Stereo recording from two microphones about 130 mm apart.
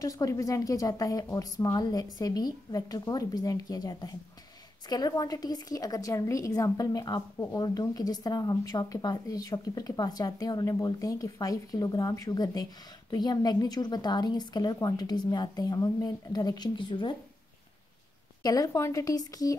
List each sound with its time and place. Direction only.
0.0 s a woman's voice: 25° left (ahead or behind)
18.4 s speech: 30° left (ahead or behind)